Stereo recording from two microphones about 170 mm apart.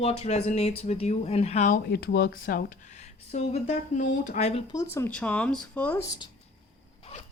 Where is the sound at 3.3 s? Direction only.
45° left (ahead or behind).